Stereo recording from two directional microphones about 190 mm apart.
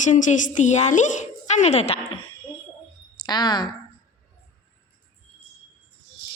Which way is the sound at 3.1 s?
25° left (ahead or behind).